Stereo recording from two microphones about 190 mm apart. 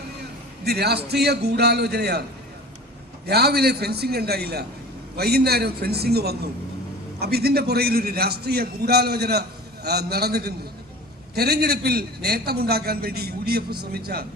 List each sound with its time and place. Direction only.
0.6 s a man's voice: 60° right (ahead or behind)
3.2 s a man's voice: 55° right (ahead or behind)